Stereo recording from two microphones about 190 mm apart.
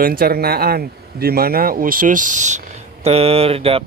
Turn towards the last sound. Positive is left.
turn(degrees=-30)  # may be behind; listen again after turning